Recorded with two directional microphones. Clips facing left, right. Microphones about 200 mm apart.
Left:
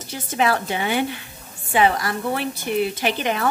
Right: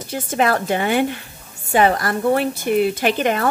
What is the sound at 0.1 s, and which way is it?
A woman's voice, 50° right (ahead or behind).